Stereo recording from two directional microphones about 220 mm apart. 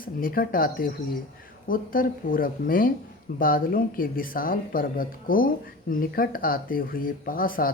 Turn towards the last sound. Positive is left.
turn(degrees=40)  # may be behind; listen again after turning